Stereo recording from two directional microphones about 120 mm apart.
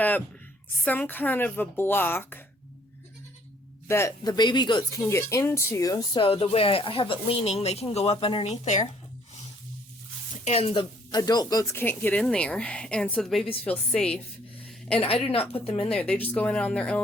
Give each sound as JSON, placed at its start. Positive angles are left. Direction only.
{"t": 0.9, "sound": "a woman's voice", "side_deg": 15}
{"t": 3.8, "sound": "speech", "side_deg": 20}
{"t": 4.2, "sound": "a woman's voice", "side_deg": 35}
{"t": 5.0, "sound": "speech", "side_deg": 25}
{"t": 6.2, "sound": "speech", "side_deg": 50}
{"t": 8.2, "sound": "speech", "side_deg": 45}
{"t": 8.4, "sound": "speech", "side_deg": 80}
{"t": 10.4, "sound": "a woman's voice", "side_deg": 55}
{"t": 11.8, "sound": "a woman's voice", "side_deg": 15}
{"t": 15.0, "sound": "speech", "side_deg": 50}
{"t": 15.9, "sound": "a woman's voice", "side_deg": 10}